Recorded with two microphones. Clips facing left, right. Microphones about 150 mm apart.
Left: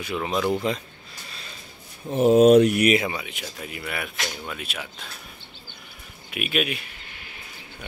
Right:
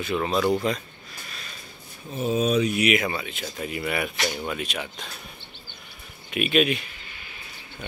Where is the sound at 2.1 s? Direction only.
70° left (ahead or behind).